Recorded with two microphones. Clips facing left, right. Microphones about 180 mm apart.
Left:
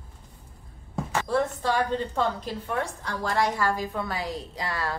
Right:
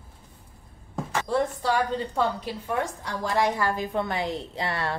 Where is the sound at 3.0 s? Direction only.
15° right (ahead or behind).